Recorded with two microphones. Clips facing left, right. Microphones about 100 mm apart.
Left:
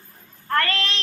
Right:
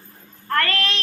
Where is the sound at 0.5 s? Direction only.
20° left (ahead or behind).